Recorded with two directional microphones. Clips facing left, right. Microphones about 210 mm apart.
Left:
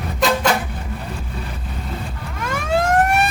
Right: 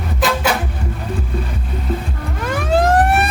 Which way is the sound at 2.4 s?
35° right (ahead or behind).